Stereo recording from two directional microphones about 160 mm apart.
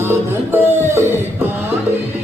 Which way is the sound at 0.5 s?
15° right (ahead or behind).